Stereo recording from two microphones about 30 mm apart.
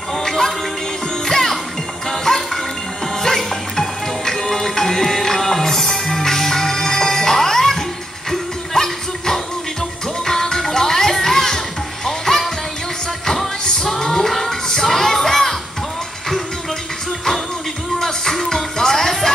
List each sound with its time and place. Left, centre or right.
0.2 s music: centre
13.7 s music: left
17.9 s music: centre